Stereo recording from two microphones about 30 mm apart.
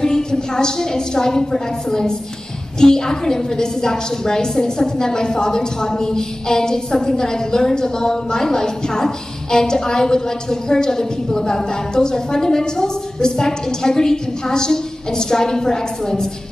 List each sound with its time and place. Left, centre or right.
0.0 s a woman's voice: left